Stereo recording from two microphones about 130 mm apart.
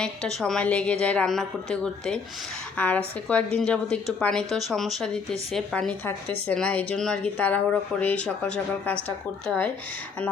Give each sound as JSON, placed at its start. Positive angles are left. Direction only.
{"t": 0.0, "sound": "a woman's voice", "side_deg": 5}